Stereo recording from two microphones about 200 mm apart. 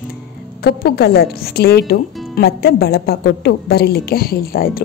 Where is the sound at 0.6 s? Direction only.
50° left (ahead or behind).